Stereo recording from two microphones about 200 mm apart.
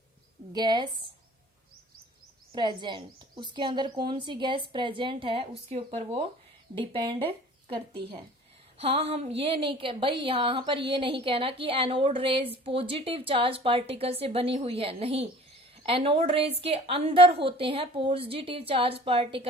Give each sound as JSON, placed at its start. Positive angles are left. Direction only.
{"t": 0.5, "sound": "a woman's voice", "side_deg": -20}
{"t": 2.5, "sound": "a woman's voice", "side_deg": -20}